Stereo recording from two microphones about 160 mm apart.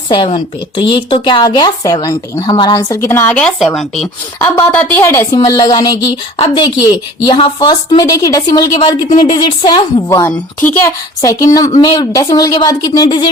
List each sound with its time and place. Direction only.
0.1 s speech: 30° left (ahead or behind); by 4.1 s centre (ahead or behind)
4.4 s speech: 15° left (ahead or behind)